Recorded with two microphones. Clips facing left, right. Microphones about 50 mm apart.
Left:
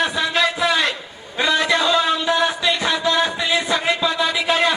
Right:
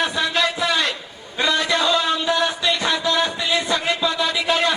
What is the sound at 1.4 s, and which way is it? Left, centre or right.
Music, centre.